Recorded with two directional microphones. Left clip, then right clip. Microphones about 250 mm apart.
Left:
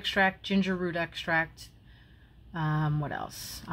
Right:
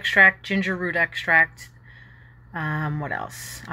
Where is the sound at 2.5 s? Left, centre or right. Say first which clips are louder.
Right 5 dB; centre.